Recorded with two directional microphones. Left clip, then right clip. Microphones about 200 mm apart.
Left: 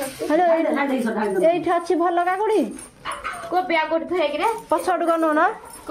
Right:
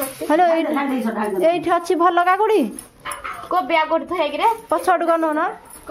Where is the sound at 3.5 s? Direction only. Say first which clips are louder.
Right 3 dB; 50° right (ahead or behind).